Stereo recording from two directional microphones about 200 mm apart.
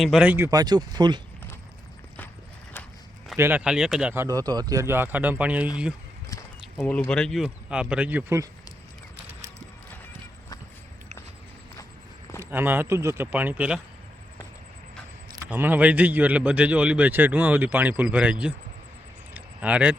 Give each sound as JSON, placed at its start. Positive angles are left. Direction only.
{"t": 0.0, "sound": "a man's voice", "side_deg": -5}
{"t": 3.3, "sound": "a man's voice", "side_deg": -10}
{"t": 6.7, "sound": "speech", "side_deg": 5}
{"t": 12.4, "sound": "a man's voice", "side_deg": -10}
{"t": 15.4, "sound": "a man's voice", "side_deg": -10}
{"t": 19.3, "sound": "a sound", "side_deg": -5}